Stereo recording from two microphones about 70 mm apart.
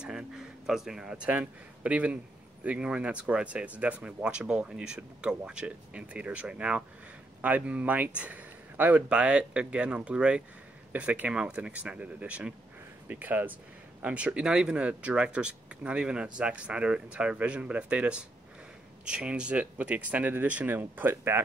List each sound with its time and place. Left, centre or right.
0.0 s speech: centre; by 21.4 s right